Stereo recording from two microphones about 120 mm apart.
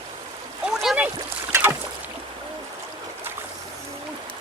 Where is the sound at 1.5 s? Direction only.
20° right (ahead or behind).